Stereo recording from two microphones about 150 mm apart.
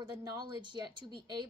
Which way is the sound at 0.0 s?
25° right (ahead or behind).